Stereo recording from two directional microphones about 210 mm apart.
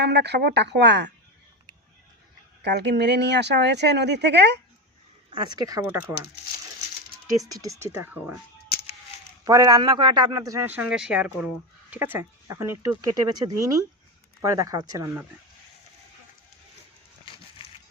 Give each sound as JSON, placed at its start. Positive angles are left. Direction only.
{"t": 0.0, "sound": "speech", "side_deg": -55}
{"t": 2.6, "sound": "speech", "side_deg": -55}
{"t": 5.3, "sound": "a man's voice", "side_deg": -20}
{"t": 7.4, "sound": "a man's voice", "side_deg": -15}
{"t": 9.4, "sound": "a man's voice", "side_deg": -15}